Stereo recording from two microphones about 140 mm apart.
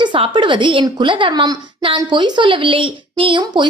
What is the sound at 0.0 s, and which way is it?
A woman's voice, 35° right (ahead or behind).